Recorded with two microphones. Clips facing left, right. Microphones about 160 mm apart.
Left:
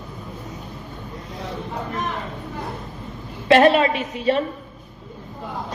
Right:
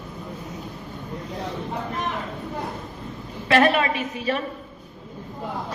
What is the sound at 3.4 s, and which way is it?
Speech, 30° left (ahead or behind).